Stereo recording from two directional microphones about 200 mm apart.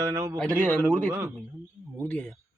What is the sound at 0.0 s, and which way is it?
Speech, 15° right (ahead or behind).